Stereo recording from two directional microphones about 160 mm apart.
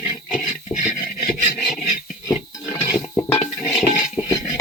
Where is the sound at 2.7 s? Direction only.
15° left (ahead or behind).